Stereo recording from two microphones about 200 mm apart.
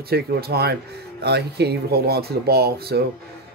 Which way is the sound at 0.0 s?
50° right (ahead or behind).